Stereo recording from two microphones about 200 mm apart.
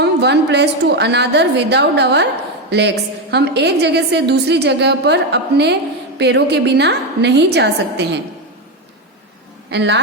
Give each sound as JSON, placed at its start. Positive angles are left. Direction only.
{"t": 0.0, "sound": "a woman's voice", "side_deg": -55}
{"t": 9.6, "sound": "speech", "side_deg": -60}